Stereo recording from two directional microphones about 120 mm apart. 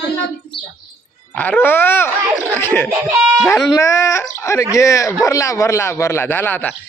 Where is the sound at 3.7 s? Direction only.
25° left (ahead or behind).